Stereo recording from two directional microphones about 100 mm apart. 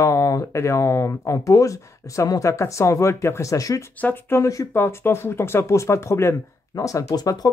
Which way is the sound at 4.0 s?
20° left (ahead or behind).